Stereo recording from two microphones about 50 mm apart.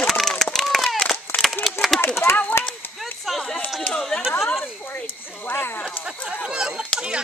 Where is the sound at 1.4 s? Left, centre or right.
Centre.